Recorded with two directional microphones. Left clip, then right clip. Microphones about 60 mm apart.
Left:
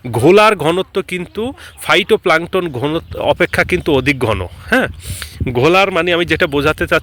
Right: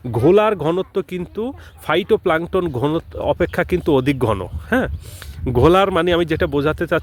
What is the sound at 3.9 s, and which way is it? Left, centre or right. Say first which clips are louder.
Speech: left 3 dB; right.